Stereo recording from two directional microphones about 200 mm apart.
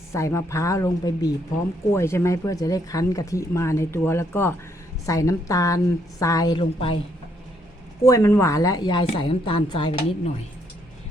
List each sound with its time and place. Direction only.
0.1 s speech: 15° left (ahead or behind)
8.0 s a woman's voice: 15° left (ahead or behind)